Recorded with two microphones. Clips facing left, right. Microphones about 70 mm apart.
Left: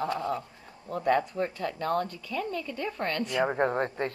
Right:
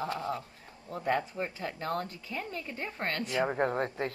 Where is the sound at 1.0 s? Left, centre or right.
Left.